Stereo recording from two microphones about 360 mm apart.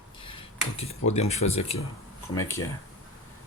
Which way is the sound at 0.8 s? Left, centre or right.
Centre.